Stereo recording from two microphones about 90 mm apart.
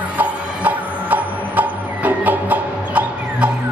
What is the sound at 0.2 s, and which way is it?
Music, 20° right (ahead or behind).